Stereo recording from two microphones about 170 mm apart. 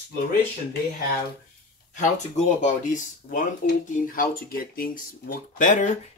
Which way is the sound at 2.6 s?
45° left (ahead or behind).